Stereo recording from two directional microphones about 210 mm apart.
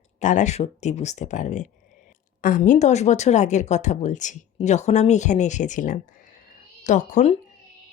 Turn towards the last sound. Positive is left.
turn(degrees=35)  # may be behind; listen again after turning